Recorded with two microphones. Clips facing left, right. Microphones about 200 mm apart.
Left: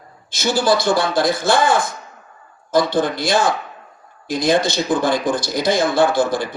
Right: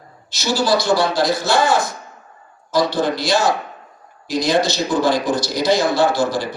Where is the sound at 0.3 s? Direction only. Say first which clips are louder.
Left 1 dB; 55° left (ahead or behind).